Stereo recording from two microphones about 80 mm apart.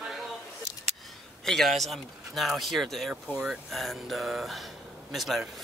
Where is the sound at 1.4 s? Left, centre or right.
Centre.